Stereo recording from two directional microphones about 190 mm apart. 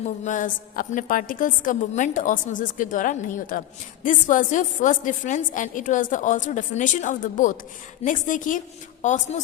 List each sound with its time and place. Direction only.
0.3 s a woman's voice: 45° left (ahead or behind)